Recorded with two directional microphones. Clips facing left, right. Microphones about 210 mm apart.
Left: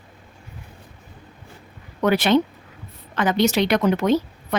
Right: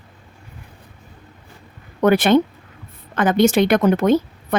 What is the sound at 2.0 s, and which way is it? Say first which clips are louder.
A woman's voice: right 4 dB; 50° right (ahead or behind).